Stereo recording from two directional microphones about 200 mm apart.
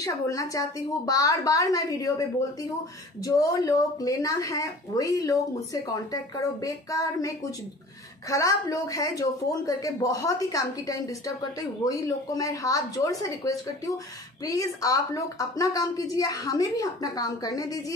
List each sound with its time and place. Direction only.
0.0 s a woman's voice: 15° left (ahead or behind)
3.3 s a woman's voice: 15° left (ahead or behind)